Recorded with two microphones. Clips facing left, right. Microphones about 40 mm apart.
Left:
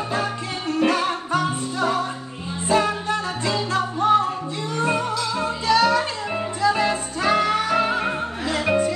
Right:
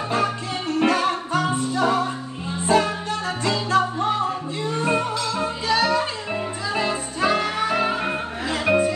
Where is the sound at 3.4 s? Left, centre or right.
Right.